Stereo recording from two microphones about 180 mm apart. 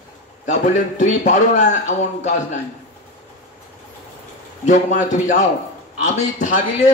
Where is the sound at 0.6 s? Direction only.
45° left (ahead or behind).